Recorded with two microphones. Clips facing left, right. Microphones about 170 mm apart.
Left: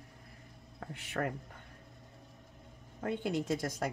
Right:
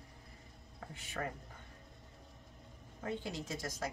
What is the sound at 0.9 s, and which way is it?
Speech, 65° left (ahead or behind).